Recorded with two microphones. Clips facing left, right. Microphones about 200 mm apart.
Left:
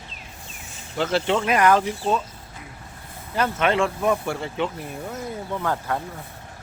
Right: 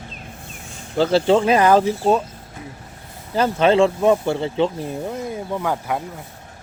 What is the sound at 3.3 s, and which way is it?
Speech, 30° right (ahead or behind).